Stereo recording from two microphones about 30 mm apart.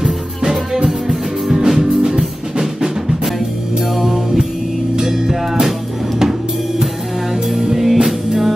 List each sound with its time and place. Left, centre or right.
0.8 s music: centre
7.7 s music: centre